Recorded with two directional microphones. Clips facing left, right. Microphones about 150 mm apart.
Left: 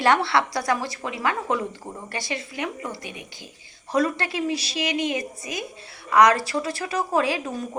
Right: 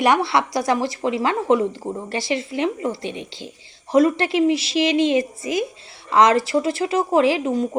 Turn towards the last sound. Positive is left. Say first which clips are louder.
# right 7 dB
turn(degrees=-20)  # may be behind; listen again after turning